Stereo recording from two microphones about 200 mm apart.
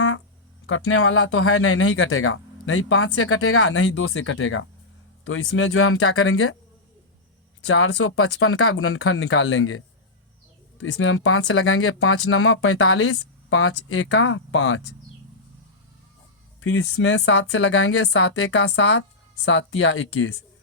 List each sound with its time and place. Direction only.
0.7 s speech: 90° left
7.6 s speech: 90° left; by 14.8 s 70° left (ahead or behind)
16.6 s speech: 90° left